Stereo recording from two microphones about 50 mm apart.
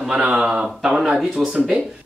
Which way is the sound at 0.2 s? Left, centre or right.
Centre.